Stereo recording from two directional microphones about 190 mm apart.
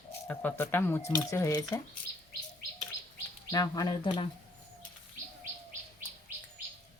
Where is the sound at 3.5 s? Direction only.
20° left (ahead or behind).